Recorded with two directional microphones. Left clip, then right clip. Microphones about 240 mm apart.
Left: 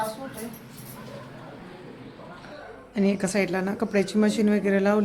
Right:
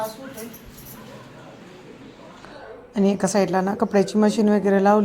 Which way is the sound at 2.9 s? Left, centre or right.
Centre.